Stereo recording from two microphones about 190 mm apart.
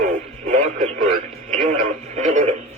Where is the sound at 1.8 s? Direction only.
40° right (ahead or behind).